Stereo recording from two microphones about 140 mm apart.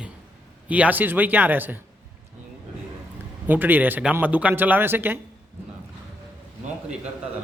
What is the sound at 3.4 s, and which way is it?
A man's voice, 15° right (ahead or behind).